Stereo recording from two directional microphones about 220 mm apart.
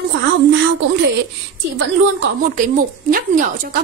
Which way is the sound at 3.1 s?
40° right (ahead or behind).